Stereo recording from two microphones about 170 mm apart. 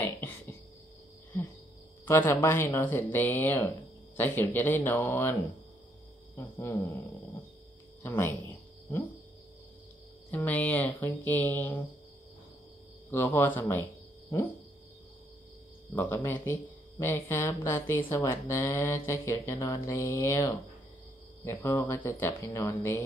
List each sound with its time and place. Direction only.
0.0 s a sound: 15° left (ahead or behind)
2.0 s speech: 15° left (ahead or behind)
6.3 s speech: 15° left (ahead or behind)
10.3 s speech: 10° left (ahead or behind)
13.1 s speech: 10° left (ahead or behind)
15.9 s speech: 10° left (ahead or behind)